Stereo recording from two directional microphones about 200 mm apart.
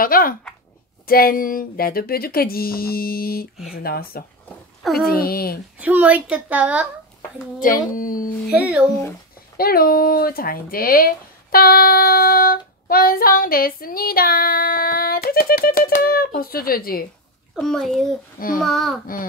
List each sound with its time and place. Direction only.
0.0 s speech: 45° left (ahead or behind)
5.8 s a woman's voice: 10° right (ahead or behind)
7.6 s speech: 45° left (ahead or behind)
8.5 s a woman's voice: 5° right (ahead or behind)
9.6 s speech: 50° left (ahead or behind)
17.6 s a child's voice: centre (ahead or behind)